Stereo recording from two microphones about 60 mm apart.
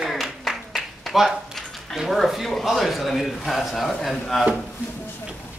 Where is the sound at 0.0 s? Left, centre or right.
Centre.